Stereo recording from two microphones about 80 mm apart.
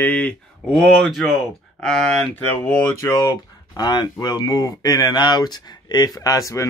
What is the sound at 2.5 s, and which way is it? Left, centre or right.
Speech, left.